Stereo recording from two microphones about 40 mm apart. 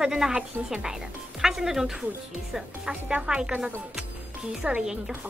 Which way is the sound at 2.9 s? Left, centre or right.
Right.